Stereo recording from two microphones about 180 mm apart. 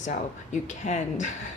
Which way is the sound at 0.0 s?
45° left (ahead or behind).